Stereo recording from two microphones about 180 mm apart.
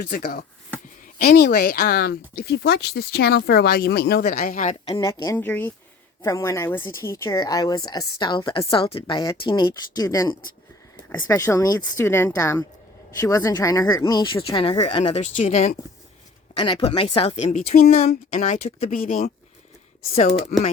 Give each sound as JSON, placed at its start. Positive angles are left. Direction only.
{"t": 0.0, "sound": "speech", "side_deg": 55}
{"t": 4.9, "sound": "speech", "side_deg": 25}
{"t": 16.6, "sound": "speech", "side_deg": 30}
{"t": 17.7, "sound": "speech", "side_deg": 55}
{"t": 18.0, "sound": "speech", "side_deg": 40}